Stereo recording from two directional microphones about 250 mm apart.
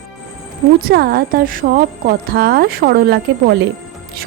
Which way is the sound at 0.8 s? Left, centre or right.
Right.